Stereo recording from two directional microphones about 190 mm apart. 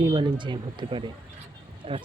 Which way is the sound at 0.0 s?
25° right (ahead or behind).